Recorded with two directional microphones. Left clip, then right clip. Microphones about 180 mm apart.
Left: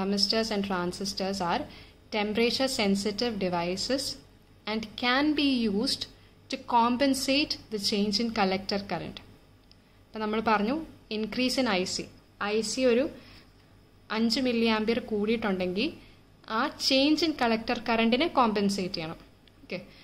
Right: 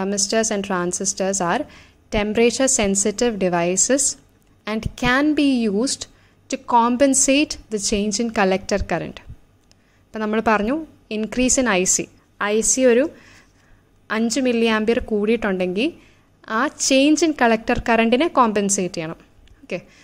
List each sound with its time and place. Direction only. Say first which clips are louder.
0.0 s a woman's voice: right 7 dB; 45° right (ahead or behind)